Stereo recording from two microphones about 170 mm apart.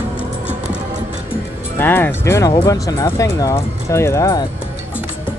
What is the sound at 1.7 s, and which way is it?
Speech, 10° left (ahead or behind).